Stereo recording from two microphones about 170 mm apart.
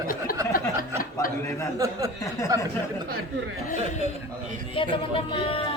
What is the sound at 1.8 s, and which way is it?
Speech, 20° right (ahead or behind).